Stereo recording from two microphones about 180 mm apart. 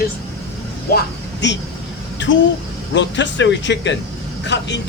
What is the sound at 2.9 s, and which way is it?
Speech, 80° left.